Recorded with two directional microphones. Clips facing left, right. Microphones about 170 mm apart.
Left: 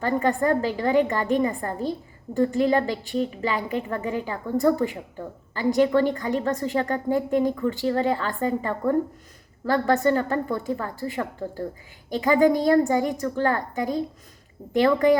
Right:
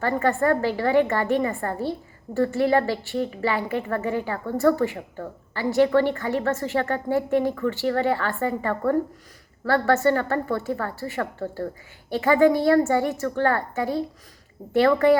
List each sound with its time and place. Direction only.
0.0 s a woman's voice: 15° left (ahead or behind)